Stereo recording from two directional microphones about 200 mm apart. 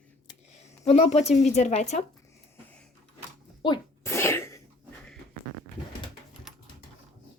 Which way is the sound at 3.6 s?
15° left (ahead or behind).